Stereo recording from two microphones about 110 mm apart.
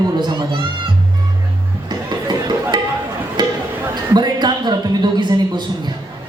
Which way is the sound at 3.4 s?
45° right (ahead or behind).